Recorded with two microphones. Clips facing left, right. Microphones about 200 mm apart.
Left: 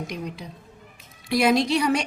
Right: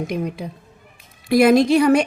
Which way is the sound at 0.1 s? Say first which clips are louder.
Right 8 dB; 55° right (ahead or behind).